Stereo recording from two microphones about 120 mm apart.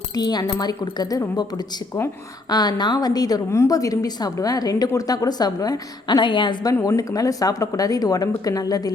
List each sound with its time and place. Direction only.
0.1 s a woman's voice: 35° left (ahead or behind)
2.5 s a woman's voice: 35° left (ahead or behind)